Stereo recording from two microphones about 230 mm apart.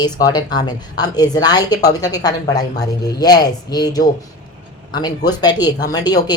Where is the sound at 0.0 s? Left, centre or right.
Centre.